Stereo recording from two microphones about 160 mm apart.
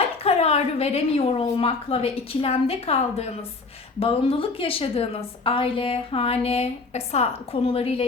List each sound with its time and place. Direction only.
0.3 s a woman's voice: 40° left (ahead or behind)